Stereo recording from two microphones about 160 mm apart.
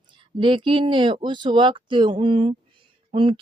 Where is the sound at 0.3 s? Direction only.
30° right (ahead or behind).